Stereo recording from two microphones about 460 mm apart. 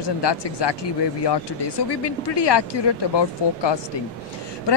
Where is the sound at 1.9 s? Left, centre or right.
Left.